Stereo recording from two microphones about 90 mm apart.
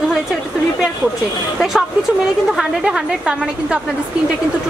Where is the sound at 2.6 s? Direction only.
5° right (ahead or behind).